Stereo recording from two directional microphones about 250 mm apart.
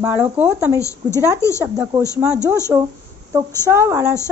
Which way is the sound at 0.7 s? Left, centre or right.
Centre.